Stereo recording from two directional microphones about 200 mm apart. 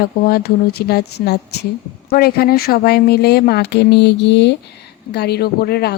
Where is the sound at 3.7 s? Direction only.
60° left (ahead or behind).